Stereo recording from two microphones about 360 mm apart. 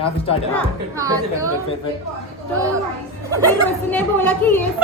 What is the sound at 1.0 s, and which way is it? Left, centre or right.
Speech, centre.